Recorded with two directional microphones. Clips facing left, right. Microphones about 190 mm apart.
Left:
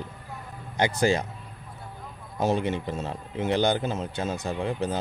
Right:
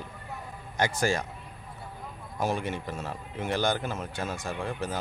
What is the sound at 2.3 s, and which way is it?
Speech, 20° left (ahead or behind).